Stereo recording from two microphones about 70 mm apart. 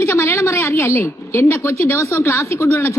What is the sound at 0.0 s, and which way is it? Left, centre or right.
A woman's voice, left.